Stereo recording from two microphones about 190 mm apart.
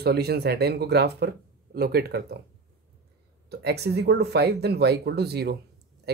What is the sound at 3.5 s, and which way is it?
Speech, 60° right (ahead or behind).